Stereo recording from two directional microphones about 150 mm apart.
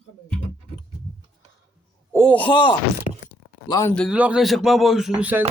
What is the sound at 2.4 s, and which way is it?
Speech, 35° left (ahead or behind).